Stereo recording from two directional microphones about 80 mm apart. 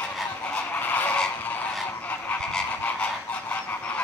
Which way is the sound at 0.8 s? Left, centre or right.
Left.